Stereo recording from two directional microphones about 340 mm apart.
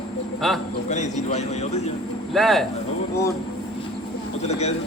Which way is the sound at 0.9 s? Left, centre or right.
Left.